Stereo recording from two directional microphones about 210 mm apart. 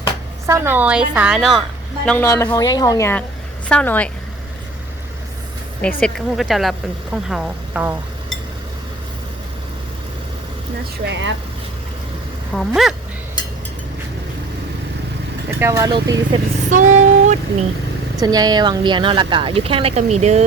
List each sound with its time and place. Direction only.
0.4 s speech: 10° right (ahead or behind)
2.0 s a woman's voice: 10° left (ahead or behind)
6.0 s speech: centre (ahead or behind)
11.0 s speech: 60° right (ahead or behind)
12.5 s speech: centre (ahead or behind)
15.4 s speech: 10° right (ahead or behind)
16.6 s a sound: 35° right (ahead or behind)
18.2 s speech: 20° right (ahead or behind)